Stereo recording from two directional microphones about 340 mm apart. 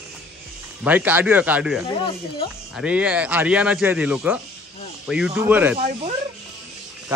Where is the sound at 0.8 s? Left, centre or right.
Centre.